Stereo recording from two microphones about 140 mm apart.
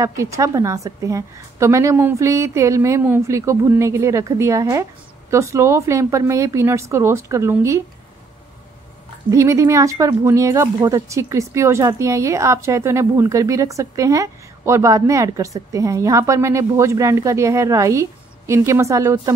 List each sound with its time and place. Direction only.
0.0 s speech: 20° right (ahead or behind)
9.3 s speech: 20° right (ahead or behind)